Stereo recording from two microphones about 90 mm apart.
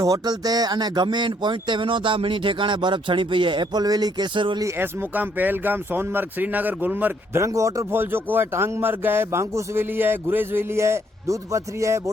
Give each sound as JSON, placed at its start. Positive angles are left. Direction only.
{"t": 0.0, "sound": "speech", "side_deg": -40}
{"t": 4.4, "sound": "speech", "side_deg": -65}
{"t": 4.8, "sound": "speech", "side_deg": -20}